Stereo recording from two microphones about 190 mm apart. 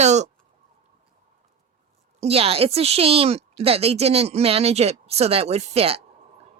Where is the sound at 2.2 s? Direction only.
30° right (ahead or behind).